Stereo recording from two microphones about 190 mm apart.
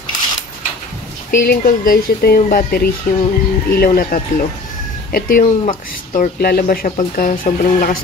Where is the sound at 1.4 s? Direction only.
50° left (ahead or behind).